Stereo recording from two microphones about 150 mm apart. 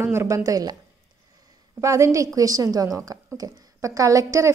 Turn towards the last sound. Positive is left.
turn(degrees=-20)  # may be behind; listen again after turning